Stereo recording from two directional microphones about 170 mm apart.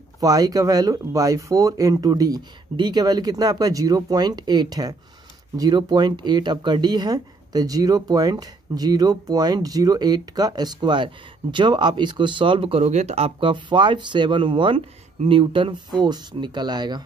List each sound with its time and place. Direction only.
0.2 s speech: 20° right (ahead or behind)